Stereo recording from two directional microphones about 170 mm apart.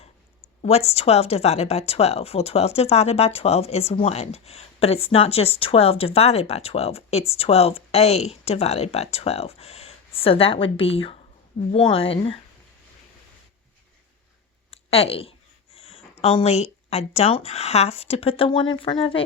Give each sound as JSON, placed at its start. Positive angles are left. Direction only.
{"t": 0.0, "sound": "speech", "side_deg": 40}
{"t": 14.7, "sound": "a sound", "side_deg": 35}
{"t": 16.2, "sound": "speech", "side_deg": 35}